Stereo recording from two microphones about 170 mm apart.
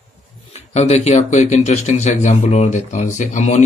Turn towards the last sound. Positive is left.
turn(degrees=45)  # may be behind; listen again after turning